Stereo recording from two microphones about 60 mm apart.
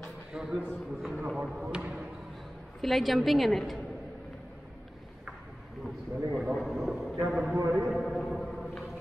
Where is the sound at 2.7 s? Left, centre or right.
Centre.